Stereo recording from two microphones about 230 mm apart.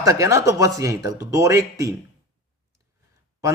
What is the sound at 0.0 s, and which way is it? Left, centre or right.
A man's voice, centre.